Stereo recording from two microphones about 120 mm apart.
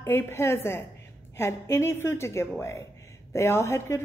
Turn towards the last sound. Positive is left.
turn(degrees=20)  # may be behind; listen again after turning